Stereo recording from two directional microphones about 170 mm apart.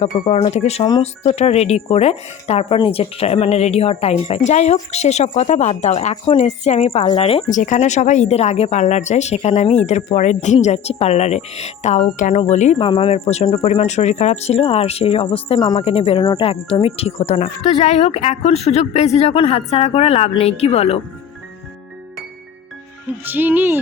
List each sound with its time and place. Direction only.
0.0 s speech: 40° left (ahead or behind)
7.5 s speech: 45° left (ahead or behind)
12.8 s speech: 30° left (ahead or behind)
23.2 s speech: 10° right (ahead or behind)